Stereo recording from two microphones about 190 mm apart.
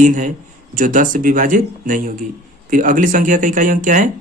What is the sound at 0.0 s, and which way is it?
A man's voice, 40° right (ahead or behind).